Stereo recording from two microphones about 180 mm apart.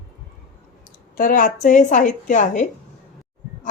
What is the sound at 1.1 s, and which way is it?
A woman's voice, 50° left (ahead or behind).